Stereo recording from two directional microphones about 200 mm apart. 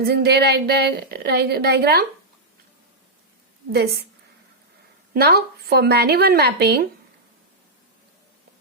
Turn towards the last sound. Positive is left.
turn(degrees=-55)  # may be behind; listen again after turning